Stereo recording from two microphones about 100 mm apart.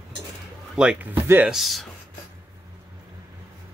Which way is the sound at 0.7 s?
10° right (ahead or behind).